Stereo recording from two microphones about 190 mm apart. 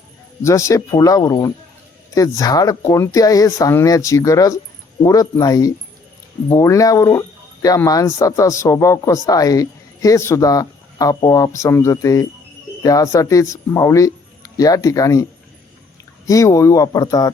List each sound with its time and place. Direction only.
0.4 s speech: 15° left (ahead or behind)